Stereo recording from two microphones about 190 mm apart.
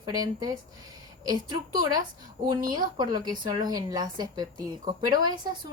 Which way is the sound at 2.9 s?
20° right (ahead or behind).